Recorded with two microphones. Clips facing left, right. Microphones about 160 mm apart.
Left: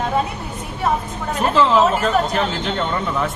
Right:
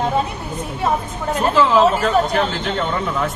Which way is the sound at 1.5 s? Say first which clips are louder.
Right 1 dB; centre (ahead or behind).